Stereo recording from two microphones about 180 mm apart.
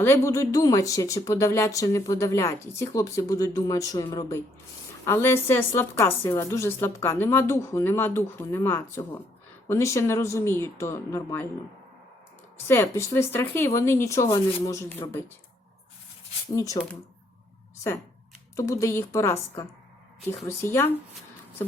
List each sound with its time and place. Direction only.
0.0 s a woman's voice: 15° left (ahead or behind)
12.6 s a woman's voice: 15° left (ahead or behind)
16.5 s speech: 20° left (ahead or behind)
18.5 s a woman's voice: 15° left (ahead or behind)